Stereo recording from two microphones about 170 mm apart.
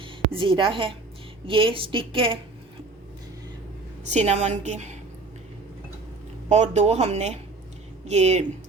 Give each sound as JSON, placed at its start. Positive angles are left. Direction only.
{"t": 0.0, "sound": "a woman's voice", "side_deg": -30}
{"t": 4.1, "sound": "a woman's voice", "side_deg": -40}
{"t": 6.5, "sound": "a woman's voice", "side_deg": -40}